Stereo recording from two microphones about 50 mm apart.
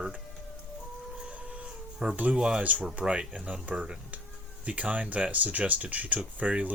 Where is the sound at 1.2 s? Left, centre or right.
Right.